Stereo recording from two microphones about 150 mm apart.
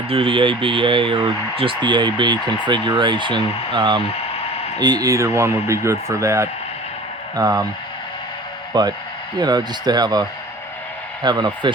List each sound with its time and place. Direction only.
0.1 s speech: 35° right (ahead or behind)
8.7 s speech: 30° right (ahead or behind)